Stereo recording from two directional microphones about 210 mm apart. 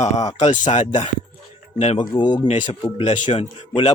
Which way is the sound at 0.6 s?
20° left (ahead or behind).